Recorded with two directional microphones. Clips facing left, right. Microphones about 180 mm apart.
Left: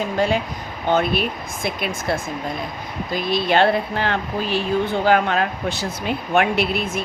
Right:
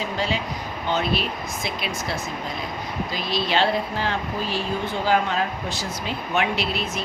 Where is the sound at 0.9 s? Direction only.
55° left (ahead or behind).